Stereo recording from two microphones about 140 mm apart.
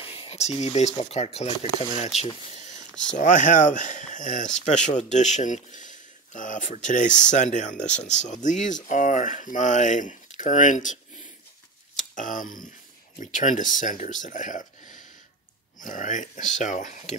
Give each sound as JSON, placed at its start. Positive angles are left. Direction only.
{"t": 0.0, "sound": "speech", "side_deg": 45}
{"t": 3.2, "sound": "speech", "side_deg": 65}
{"t": 12.0, "sound": "speech", "side_deg": 65}